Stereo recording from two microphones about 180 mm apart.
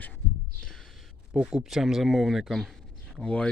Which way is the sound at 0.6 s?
Centre (ahead or behind).